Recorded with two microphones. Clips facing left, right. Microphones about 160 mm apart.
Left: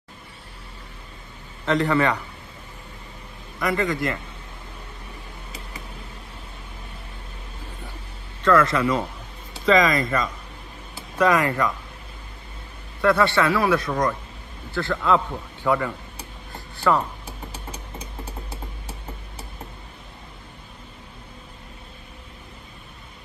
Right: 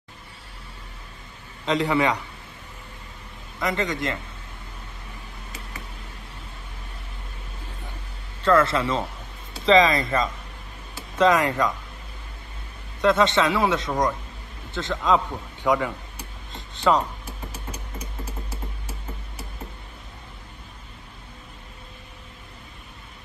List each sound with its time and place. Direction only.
1.7 s a man's voice: 15° right (ahead or behind)
3.5 s speech: 20° right (ahead or behind)
8.4 s speech: 30° right (ahead or behind)
13.0 s a man's voice: 20° right (ahead or behind)
16.5 s a sound: 20° right (ahead or behind)
17.5 s a sound: 30° left (ahead or behind)